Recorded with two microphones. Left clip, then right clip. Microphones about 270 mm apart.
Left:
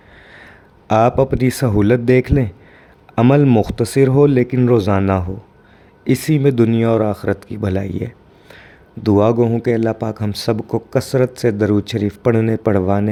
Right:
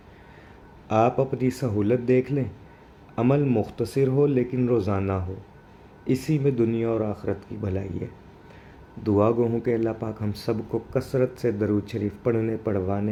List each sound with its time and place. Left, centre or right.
0.9 s speech: left